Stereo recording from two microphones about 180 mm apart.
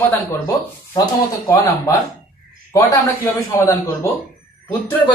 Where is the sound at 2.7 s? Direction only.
15° left (ahead or behind).